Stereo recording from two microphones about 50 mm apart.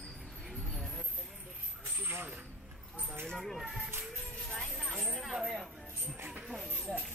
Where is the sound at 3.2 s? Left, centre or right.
Centre.